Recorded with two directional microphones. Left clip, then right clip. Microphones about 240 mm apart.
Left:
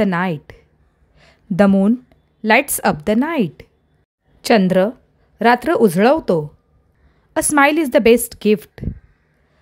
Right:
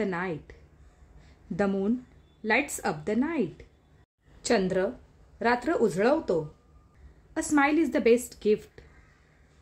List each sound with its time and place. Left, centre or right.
0.0 s a woman's voice: left
1.2 s a sound: left
2.4 s a woman's voice: left